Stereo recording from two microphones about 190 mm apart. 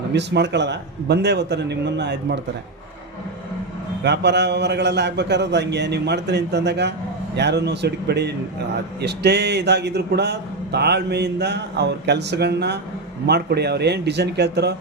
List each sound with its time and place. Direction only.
0.1 s speech: 65° right (ahead or behind)
4.0 s speech: 65° right (ahead or behind)